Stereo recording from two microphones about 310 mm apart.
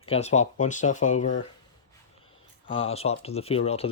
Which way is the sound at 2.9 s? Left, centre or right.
Centre.